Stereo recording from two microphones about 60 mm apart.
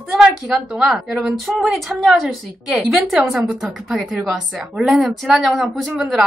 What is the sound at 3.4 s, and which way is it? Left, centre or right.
Speech, right.